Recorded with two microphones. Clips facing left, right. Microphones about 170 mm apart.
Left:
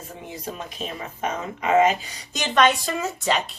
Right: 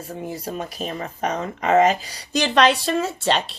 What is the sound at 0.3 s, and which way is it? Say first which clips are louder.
Speech: right 3 dB; 40° right (ahead or behind).